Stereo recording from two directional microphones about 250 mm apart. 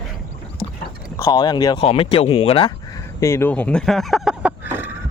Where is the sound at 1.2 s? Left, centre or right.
Centre.